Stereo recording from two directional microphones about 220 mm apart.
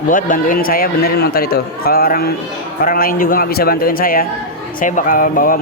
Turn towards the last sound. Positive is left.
turn(degrees=40)  # may be behind; listen again after turning